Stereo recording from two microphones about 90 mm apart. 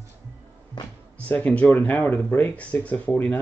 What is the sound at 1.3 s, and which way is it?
Speech, 15° left (ahead or behind).